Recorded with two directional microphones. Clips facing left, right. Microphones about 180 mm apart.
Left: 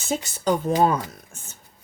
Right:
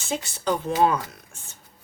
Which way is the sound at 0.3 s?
40° left (ahead or behind).